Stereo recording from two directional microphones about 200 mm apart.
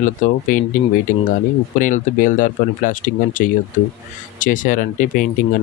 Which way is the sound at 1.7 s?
40° left (ahead or behind).